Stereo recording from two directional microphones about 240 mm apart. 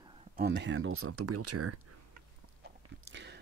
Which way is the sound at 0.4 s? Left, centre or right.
Right.